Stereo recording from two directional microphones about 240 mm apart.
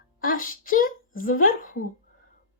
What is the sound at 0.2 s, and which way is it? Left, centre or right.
A woman's voice, left.